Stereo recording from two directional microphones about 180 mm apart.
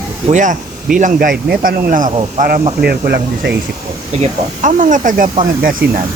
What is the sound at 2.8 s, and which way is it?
Speech, 60° right (ahead or behind).